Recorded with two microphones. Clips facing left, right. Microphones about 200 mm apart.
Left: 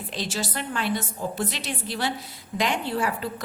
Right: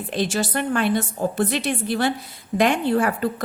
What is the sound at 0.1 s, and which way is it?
A woman's voice, 55° right (ahead or behind).